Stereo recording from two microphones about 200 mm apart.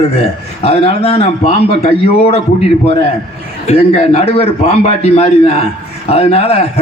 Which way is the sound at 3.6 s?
30° left (ahead or behind).